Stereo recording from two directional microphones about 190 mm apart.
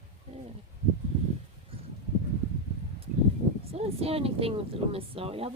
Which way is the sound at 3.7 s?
30° right (ahead or behind).